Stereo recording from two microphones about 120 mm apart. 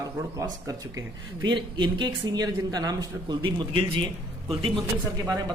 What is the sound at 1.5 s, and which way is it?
A man's voice, 40° right (ahead or behind).